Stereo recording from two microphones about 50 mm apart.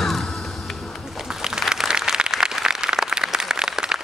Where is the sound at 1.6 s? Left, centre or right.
Centre.